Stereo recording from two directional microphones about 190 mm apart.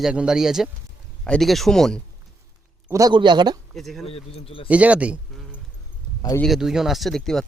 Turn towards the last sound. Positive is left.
turn(degrees=0)  # may be behind; listen again after turning